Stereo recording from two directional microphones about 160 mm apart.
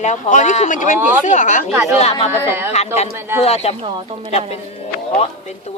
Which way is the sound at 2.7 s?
45° left (ahead or behind).